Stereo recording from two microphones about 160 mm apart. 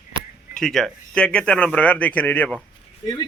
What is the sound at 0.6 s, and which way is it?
Speech, centre (ahead or behind).